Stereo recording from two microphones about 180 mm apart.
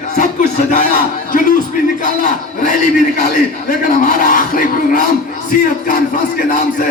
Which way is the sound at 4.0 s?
50° left (ahead or behind).